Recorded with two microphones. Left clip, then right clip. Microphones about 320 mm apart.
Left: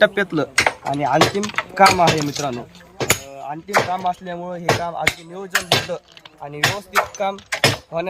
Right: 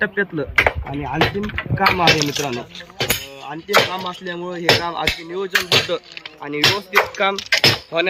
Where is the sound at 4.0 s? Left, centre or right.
Left.